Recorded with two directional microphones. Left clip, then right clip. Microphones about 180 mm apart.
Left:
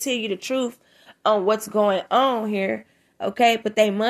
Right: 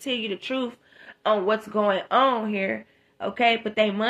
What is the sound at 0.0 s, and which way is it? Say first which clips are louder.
Speech: left 3 dB; 35° left (ahead or behind).